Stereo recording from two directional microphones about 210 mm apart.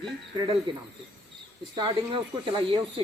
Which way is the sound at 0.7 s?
20° right (ahead or behind).